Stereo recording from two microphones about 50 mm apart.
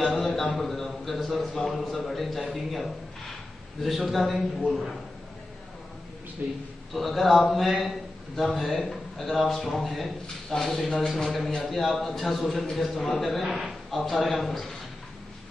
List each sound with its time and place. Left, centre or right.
0.6 s a man's voice: centre
6.4 s a man's voice: right
6.9 s a man's voice: centre
13.6 s a sound: centre
13.9 s a man's voice: centre